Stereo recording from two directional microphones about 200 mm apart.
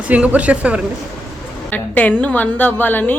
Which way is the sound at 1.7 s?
10° left (ahead or behind).